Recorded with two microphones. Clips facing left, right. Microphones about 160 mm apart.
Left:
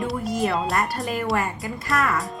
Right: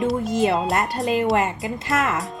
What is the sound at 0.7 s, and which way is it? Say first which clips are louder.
Speech: right 3 dB; 20° right (ahead or behind).